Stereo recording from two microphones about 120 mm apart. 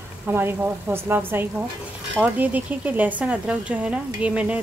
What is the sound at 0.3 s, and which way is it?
Speech, 20° right (ahead or behind).